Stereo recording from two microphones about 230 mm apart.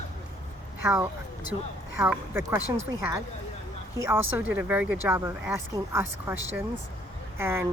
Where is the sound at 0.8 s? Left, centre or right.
Centre.